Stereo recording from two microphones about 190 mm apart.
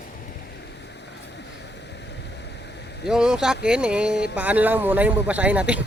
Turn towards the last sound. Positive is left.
turn(degrees=-5)  # may be behind; listen again after turning